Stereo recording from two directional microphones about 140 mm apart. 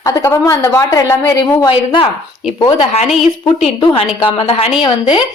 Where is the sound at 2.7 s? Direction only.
50° left (ahead or behind).